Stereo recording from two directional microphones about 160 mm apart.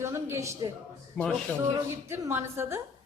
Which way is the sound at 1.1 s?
Centre (ahead or behind).